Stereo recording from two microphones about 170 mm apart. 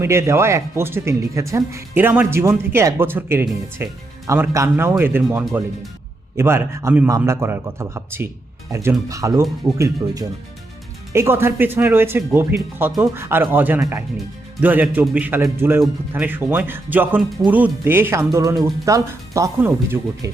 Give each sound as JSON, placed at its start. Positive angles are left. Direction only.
{"t": 0.0, "sound": "speech", "side_deg": -15}